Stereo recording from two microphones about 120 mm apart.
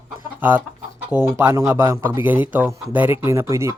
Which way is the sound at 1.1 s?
20° right (ahead or behind).